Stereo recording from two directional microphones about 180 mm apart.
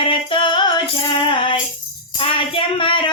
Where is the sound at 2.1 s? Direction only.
30° left (ahead or behind).